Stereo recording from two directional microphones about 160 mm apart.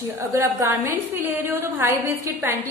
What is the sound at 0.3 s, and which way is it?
A woman's voice, 20° right (ahead or behind).